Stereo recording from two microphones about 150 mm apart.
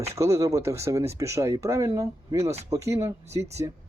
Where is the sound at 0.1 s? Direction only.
20° right (ahead or behind).